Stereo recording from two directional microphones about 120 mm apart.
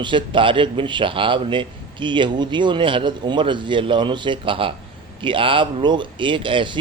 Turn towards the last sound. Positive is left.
turn(degrees=-45)  # may be behind; listen again after turning